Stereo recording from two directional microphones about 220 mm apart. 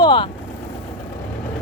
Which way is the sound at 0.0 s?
20° left (ahead or behind).